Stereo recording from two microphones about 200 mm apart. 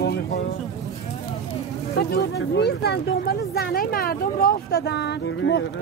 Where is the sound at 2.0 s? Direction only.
55° left (ahead or behind).